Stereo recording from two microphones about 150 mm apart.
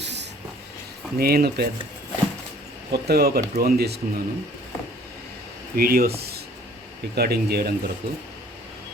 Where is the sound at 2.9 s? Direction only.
90° right.